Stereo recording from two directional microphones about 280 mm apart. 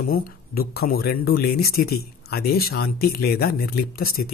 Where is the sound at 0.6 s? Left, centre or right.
Left.